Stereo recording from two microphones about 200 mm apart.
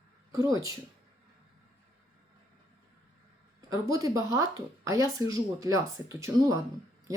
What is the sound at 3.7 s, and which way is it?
Speech, 15° right (ahead or behind).